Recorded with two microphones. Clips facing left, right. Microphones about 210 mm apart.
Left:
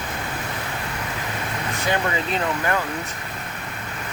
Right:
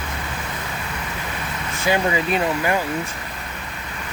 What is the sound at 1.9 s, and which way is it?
Speech, 10° right (ahead or behind).